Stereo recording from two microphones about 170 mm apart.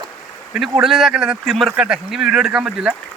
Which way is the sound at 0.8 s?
Centre (ahead or behind).